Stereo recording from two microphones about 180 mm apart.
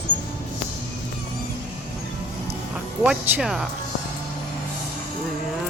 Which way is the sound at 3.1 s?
5° right (ahead or behind).